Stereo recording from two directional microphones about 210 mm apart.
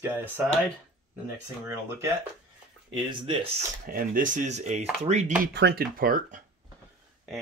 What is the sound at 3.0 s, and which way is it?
Speech, 25° right (ahead or behind).